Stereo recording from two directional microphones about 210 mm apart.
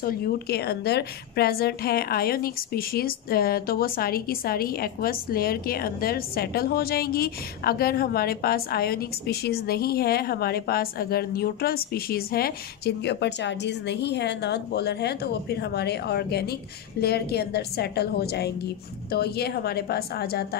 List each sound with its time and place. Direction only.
0.0 s a woman's voice: 45° left (ahead or behind)